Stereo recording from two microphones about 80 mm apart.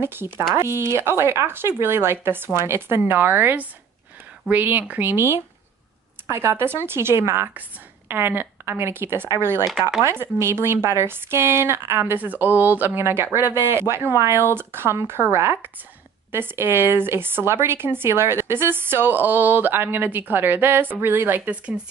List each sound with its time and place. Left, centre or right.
0.0 s speech: right
9.7 s speech: centre
10.0 s speech: right